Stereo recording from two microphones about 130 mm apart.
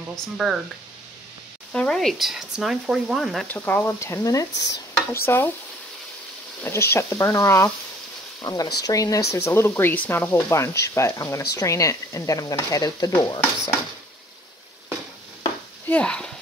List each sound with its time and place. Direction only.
0.1 s speech: centre (ahead or behind)
1.7 s speech: 5° left (ahead or behind)
3.4 s speech: 15° left (ahead or behind)
6.6 s speech: 20° left (ahead or behind)
8.4 s speech: 30° left (ahead or behind)
15.9 s speech: 10° left (ahead or behind)